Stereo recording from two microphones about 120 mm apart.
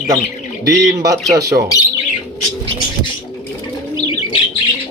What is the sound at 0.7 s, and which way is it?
Speech, 30° right (ahead or behind).